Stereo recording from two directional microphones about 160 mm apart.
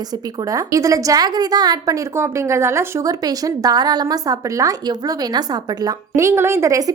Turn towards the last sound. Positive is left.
turn(degrees=-20)  # may be behind; listen again after turning